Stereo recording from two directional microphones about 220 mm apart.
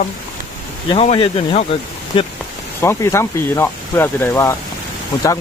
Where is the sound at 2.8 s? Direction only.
15° left (ahead or behind).